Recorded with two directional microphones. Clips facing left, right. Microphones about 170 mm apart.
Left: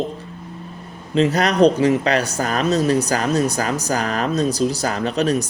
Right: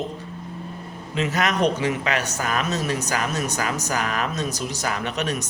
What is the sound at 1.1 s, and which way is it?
Speech, 35° left (ahead or behind).